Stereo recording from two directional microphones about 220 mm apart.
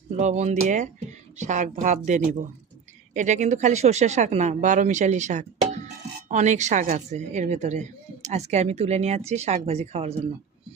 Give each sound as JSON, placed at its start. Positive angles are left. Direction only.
{"t": 0.2, "sound": "a woman's voice", "side_deg": -30}